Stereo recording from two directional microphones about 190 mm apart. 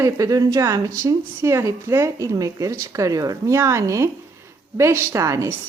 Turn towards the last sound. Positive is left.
turn(degrees=-15)  # may be behind; listen again after turning